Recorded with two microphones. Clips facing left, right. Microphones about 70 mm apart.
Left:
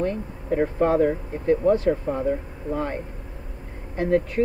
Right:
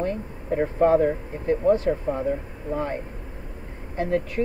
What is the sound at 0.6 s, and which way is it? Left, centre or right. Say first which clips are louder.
Speech: right 1 dB; centre.